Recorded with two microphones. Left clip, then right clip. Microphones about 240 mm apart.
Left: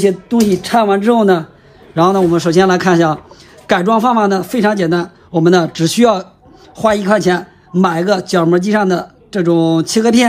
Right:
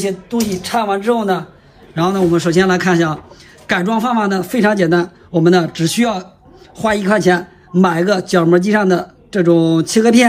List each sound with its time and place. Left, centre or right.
0.0 s speech: left
2.0 s speech: centre